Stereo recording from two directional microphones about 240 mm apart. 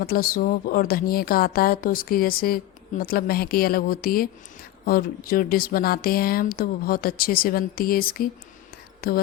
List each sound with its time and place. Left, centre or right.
0.0 s a woman's voice: left